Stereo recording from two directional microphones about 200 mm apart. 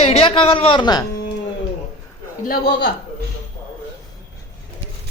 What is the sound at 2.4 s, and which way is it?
Speech, 45° left (ahead or behind).